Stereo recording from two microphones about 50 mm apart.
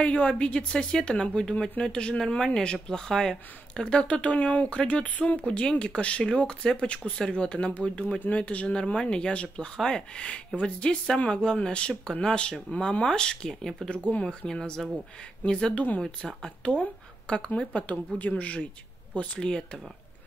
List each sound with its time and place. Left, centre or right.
0.0 s a woman's voice: left
13.8 s a woman's voice: left
14.5 s speech: centre
15.7 s a woman's voice: left
16.0 s a woman's voice: centre